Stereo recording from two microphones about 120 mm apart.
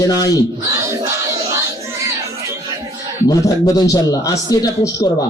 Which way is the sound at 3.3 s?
30° left (ahead or behind).